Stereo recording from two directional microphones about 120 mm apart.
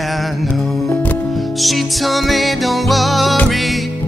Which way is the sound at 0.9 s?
15° left (ahead or behind).